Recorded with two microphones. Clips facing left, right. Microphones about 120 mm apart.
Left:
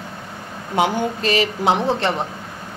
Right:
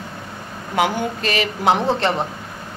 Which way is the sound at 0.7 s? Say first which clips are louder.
Left 1 dB; 30° left (ahead or behind).